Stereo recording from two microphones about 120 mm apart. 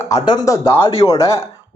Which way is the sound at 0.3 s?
30° left (ahead or behind).